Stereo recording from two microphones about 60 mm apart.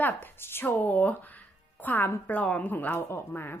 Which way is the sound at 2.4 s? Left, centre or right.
Centre.